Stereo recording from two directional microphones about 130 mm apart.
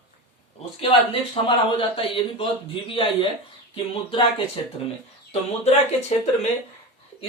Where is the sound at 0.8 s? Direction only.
40° left (ahead or behind).